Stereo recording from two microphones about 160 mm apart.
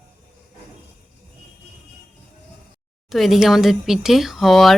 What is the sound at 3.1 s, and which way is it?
Speech, centre (ahead or behind).